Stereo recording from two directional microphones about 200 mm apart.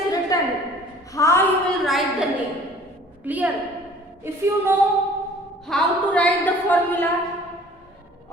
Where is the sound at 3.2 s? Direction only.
10° right (ahead or behind).